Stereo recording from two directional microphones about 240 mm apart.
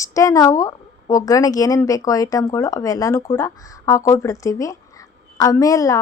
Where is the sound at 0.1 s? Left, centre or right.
Centre.